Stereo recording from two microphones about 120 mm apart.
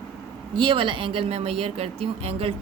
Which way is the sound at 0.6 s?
45° right (ahead or behind).